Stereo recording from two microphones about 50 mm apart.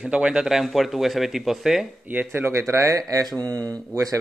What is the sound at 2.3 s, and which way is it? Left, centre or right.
Speech, right.